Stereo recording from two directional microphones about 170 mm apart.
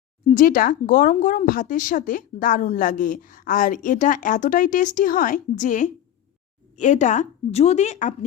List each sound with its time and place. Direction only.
0.3 s speech: 55° left (ahead or behind)